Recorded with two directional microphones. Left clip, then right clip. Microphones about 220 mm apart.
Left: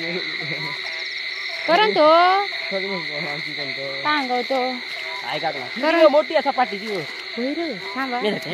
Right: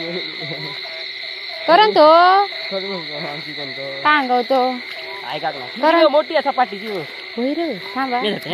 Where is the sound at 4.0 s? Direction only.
25° right (ahead or behind).